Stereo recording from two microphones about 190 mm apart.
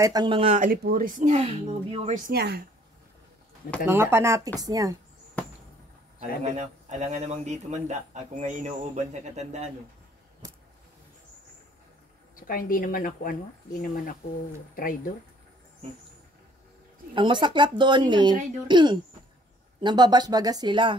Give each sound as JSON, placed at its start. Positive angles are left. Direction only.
{"t": 0.0, "sound": "speech", "side_deg": -20}
{"t": 0.6, "sound": "speech", "side_deg": -45}
{"t": 2.2, "sound": "speech", "side_deg": -55}
{"t": 3.8, "sound": "speech", "side_deg": -10}
{"t": 6.1, "sound": "speech", "side_deg": -35}
{"t": 10.4, "sound": "a sound", "side_deg": -20}
{"t": 12.4, "sound": "speech", "side_deg": 50}
{"t": 17.1, "sound": "speech", "side_deg": -25}